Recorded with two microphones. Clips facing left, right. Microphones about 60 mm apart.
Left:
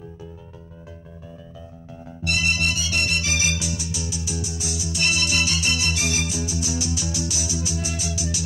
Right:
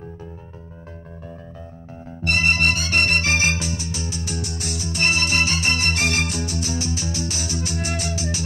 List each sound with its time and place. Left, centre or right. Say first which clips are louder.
2.2 s music: right 4 dB; right